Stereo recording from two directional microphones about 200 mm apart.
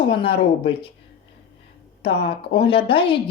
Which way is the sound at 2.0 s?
25° left (ahead or behind).